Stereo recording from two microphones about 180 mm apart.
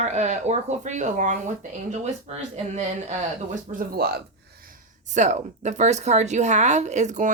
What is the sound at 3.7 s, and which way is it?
Speech, 60° right (ahead or behind).